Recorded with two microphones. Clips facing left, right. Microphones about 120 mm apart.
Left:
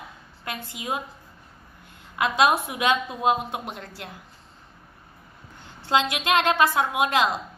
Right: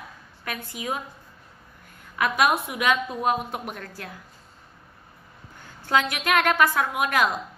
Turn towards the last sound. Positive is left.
turn(degrees=25)  # may be behind; listen again after turning